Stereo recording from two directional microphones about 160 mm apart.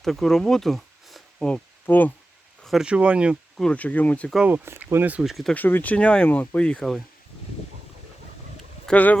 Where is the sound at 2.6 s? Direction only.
5° right (ahead or behind).